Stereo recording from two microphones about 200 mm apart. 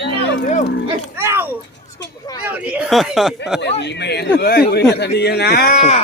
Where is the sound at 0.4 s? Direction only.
40° left (ahead or behind).